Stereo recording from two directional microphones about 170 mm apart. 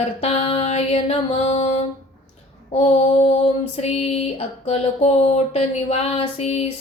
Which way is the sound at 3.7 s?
35° left (ahead or behind).